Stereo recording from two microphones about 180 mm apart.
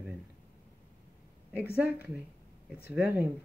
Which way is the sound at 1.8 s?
10° right (ahead or behind).